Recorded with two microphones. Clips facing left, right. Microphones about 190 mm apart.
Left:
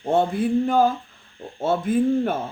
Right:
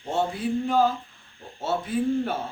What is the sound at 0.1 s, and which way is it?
Speech, 55° left (ahead or behind).